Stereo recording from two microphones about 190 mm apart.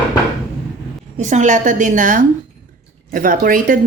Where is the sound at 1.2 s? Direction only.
40° right (ahead or behind).